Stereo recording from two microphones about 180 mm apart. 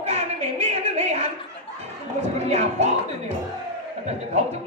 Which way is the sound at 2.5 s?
35° right (ahead or behind).